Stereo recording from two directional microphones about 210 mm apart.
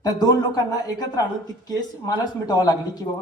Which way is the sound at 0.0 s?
20° left (ahead or behind).